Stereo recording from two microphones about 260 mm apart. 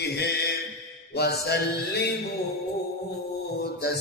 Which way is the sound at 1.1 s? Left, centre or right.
Left.